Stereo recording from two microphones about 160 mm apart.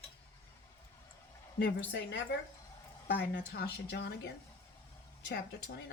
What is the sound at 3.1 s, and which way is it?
Speech, 85° left.